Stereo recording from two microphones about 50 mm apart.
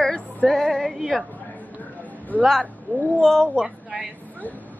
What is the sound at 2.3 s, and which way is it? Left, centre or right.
Speech, left.